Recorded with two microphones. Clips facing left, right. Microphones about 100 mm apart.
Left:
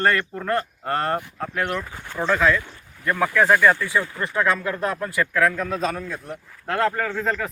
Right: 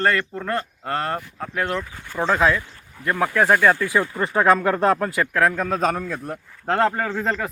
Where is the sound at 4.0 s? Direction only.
30° right (ahead or behind).